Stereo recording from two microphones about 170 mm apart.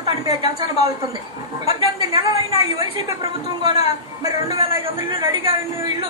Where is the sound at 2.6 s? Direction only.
20° right (ahead or behind).